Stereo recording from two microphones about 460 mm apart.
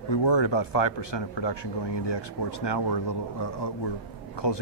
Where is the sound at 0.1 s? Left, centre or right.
Left.